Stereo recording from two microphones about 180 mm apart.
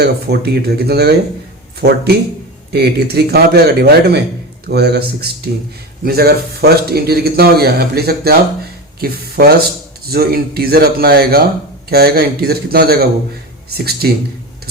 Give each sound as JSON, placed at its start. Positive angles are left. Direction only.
{"t": 0.0, "sound": "a man's voice", "side_deg": -60}